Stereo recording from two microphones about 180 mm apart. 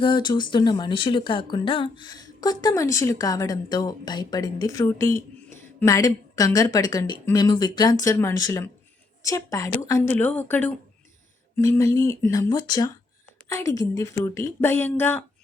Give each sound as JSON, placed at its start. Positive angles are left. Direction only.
{"t": 0.0, "sound": "a woman's voice", "side_deg": 25}